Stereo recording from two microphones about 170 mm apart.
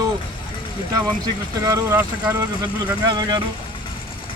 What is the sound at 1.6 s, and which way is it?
Speech, 20° right (ahead or behind).